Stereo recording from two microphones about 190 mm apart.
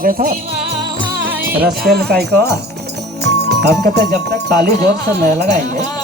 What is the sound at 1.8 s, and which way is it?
Speech, 55° right (ahead or behind).